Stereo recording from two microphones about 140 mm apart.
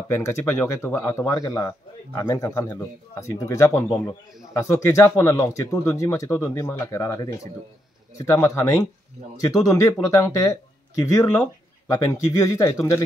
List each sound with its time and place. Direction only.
0.1 s speech: 20° left (ahead or behind)